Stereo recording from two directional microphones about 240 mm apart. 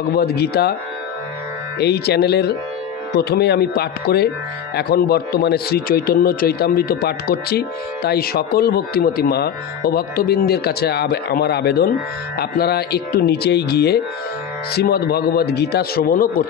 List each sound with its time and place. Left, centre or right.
0.1 s a man's voice: left
1.8 s a man's voice: left